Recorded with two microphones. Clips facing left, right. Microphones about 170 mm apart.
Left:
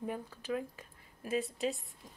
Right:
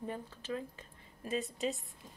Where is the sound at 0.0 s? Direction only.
10° left (ahead or behind).